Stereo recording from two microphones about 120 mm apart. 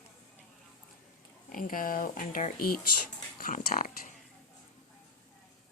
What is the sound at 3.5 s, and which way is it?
Speech, 90° left.